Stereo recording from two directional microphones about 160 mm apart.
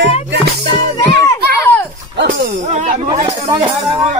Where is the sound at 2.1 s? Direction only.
90° right.